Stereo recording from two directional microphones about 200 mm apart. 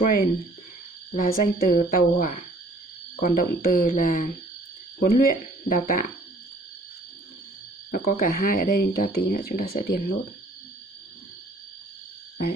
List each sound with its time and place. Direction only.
1.1 s speech: 45° left (ahead or behind)
7.9 s speech: 45° left (ahead or behind)